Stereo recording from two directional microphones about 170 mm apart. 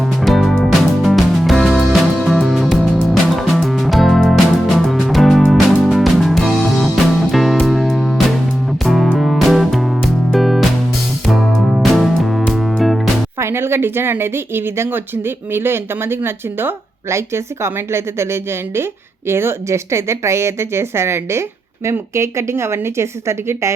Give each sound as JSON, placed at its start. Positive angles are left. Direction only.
{"t": 0.0, "sound": "music", "side_deg": 0}
{"t": 13.4, "sound": "speech", "side_deg": -15}